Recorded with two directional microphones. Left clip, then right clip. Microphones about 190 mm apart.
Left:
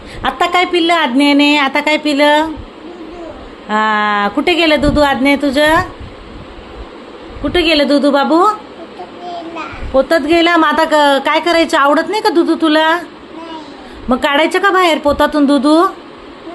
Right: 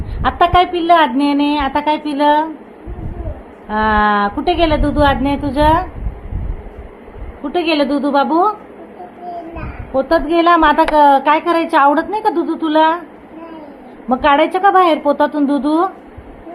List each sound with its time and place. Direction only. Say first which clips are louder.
0.2 s speech: right 1 dB; 5° left (ahead or behind)
3.7 s speech: left 1 dB; 15° left (ahead or behind)
7.5 s speech: left 4 dB; 10° left (ahead or behind)
10.0 s speech: left 2 dB; 10° left (ahead or behind)
14.1 s speech: even; 15° left (ahead or behind)
15.0 s speech: left 3 dB; 45° left (ahead or behind)